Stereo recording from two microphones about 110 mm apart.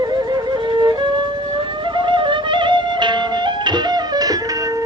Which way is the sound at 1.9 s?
45° right (ahead or behind).